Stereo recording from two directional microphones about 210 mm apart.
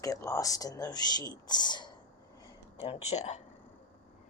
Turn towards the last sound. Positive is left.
turn(degrees=30)  # may be behind; listen again after turning